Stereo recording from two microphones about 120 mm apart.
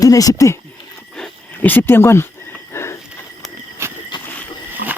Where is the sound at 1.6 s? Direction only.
15° left (ahead or behind).